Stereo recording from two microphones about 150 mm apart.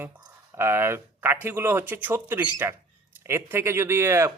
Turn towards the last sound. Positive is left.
turn(degrees=-20)  # may be behind; listen again after turning